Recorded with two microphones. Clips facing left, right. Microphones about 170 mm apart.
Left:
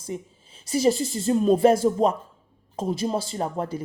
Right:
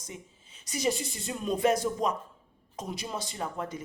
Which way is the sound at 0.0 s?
30° left (ahead or behind).